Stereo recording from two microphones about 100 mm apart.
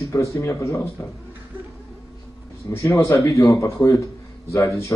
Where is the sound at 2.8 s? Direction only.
30° left (ahead or behind).